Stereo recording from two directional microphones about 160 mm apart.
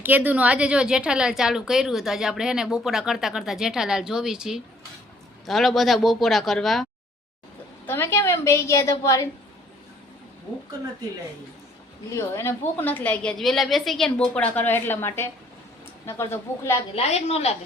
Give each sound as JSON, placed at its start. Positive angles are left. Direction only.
{"t": 0.0, "sound": "speech", "side_deg": -10}
{"t": 7.9, "sound": "a woman's voice", "side_deg": 15}
{"t": 12.1, "sound": "a woman's voice", "side_deg": 15}
{"t": 16.9, "sound": "a woman's voice", "side_deg": 40}